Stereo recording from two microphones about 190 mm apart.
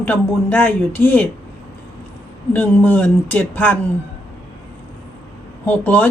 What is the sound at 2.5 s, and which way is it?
A woman's voice, 10° left (ahead or behind).